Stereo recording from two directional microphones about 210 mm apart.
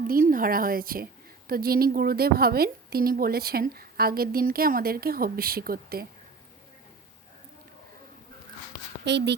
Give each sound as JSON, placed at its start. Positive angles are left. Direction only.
{"t": 0.1, "sound": "a woman's voice", "side_deg": -40}
{"t": 9.0, "sound": "speech", "side_deg": -55}